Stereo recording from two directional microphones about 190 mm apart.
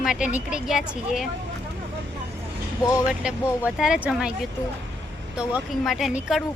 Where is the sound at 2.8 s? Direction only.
15° left (ahead or behind).